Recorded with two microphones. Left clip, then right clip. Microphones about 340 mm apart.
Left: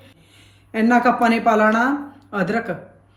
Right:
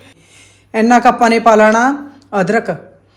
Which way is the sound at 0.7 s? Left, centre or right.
Centre.